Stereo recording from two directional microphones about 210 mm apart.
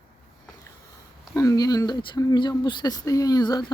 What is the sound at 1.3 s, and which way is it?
Speech, 15° left (ahead or behind).